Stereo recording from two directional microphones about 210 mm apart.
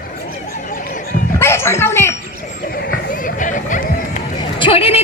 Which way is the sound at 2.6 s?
45° left (ahead or behind).